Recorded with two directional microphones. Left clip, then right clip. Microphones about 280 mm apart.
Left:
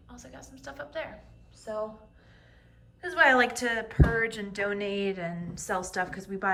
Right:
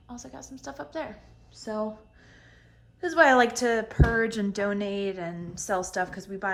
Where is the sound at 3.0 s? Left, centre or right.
Centre.